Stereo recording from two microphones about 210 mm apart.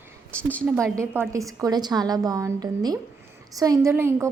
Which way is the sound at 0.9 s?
10° right (ahead or behind).